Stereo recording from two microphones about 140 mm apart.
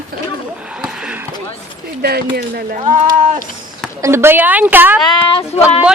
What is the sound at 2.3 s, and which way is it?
Speech, 90° right.